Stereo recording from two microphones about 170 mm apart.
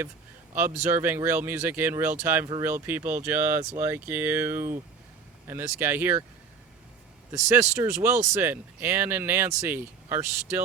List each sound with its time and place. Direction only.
0.9 s speech: 10° right (ahead or behind)
7.3 s speech: 20° right (ahead or behind)